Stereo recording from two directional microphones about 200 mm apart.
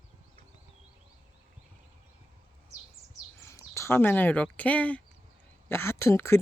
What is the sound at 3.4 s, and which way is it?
Speech, 15° left (ahead or behind).